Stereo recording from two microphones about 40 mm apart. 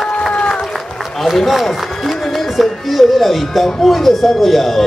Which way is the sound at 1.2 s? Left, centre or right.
Centre.